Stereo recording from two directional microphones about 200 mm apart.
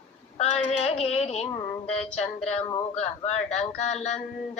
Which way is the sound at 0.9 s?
30° left (ahead or behind).